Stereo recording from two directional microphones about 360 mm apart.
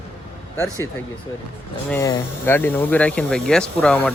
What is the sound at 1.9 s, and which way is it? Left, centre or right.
Speech, centre.